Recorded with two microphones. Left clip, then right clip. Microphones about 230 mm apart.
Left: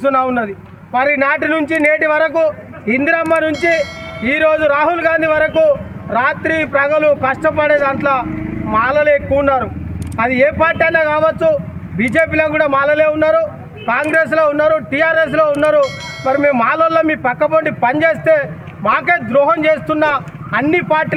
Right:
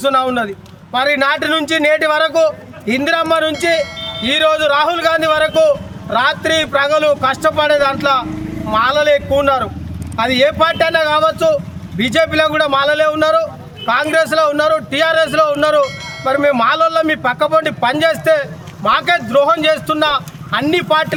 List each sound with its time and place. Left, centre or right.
0.0 s a man's voice: right